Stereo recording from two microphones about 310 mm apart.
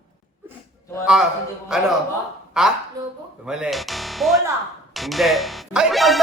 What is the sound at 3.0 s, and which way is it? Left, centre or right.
A man's voice, centre.